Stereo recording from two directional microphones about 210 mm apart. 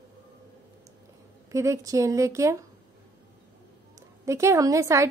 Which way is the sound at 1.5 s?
15° right (ahead or behind).